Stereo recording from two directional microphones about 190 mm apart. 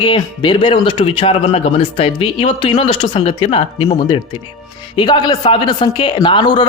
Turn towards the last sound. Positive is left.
turn(degrees=25)  # may be behind; listen again after turning